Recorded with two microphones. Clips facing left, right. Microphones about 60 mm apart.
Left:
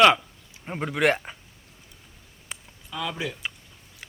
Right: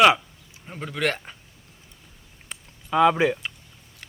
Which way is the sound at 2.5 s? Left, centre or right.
Centre.